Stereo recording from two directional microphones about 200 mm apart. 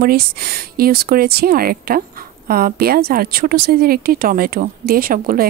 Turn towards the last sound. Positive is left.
turn(degrees=-45)  # may be behind; listen again after turning